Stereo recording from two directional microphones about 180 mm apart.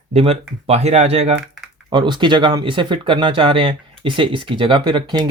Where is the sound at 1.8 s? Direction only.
25° right (ahead or behind).